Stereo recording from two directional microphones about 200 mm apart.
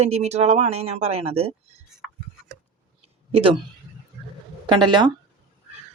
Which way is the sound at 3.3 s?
25° right (ahead or behind).